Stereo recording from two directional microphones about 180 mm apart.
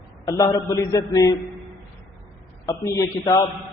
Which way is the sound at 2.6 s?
20° left (ahead or behind).